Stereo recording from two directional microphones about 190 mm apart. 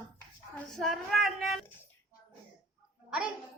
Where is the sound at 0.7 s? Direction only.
Centre (ahead or behind).